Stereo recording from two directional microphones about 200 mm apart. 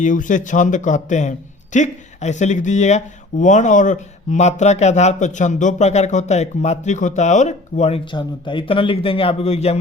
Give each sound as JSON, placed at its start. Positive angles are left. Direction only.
{"t": 0.0, "sound": "speech", "side_deg": 40}